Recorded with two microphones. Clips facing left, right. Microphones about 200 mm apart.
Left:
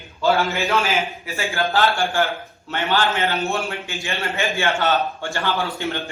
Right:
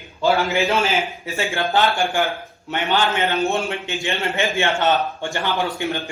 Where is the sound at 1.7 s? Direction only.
15° right (ahead or behind).